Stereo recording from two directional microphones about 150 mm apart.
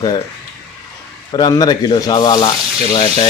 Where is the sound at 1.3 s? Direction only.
25° left (ahead or behind).